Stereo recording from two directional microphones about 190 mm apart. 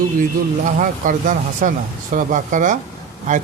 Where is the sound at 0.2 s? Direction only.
45° right (ahead or behind).